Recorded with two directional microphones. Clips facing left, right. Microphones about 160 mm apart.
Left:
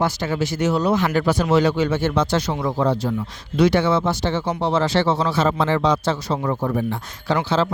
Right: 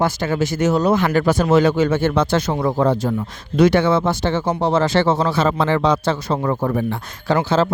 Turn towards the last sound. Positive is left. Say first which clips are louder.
# right 3 dB
turn(degrees=-45)  # may be behind; listen again after turning